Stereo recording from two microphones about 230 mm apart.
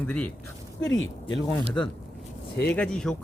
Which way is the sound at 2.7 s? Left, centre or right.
Centre.